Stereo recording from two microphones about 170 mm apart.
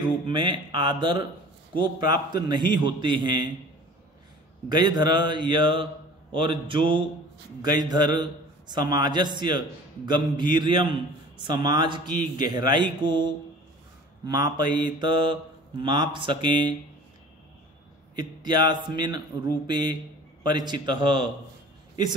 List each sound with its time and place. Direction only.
0.0 s a man's voice: 30° right (ahead or behind)
4.6 s a man's voice: 25° right (ahead or behind)
18.1 s a man's voice: 25° right (ahead or behind)